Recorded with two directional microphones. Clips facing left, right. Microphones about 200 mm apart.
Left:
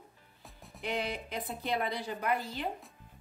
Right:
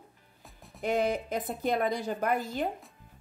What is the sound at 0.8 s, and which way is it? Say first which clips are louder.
Speech: right 7 dB; 45° right (ahead or behind).